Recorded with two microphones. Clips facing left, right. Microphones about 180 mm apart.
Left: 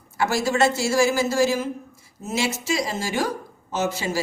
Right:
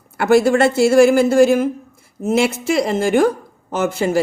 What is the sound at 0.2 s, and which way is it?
A woman's voice, 60° right (ahead or behind).